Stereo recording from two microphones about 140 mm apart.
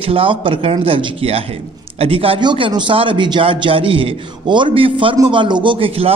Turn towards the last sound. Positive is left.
turn(degrees=-40)  # may be behind; listen again after turning